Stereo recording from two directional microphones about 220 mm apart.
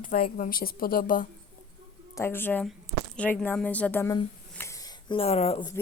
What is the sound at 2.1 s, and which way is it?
Speech, 10° left (ahead or behind).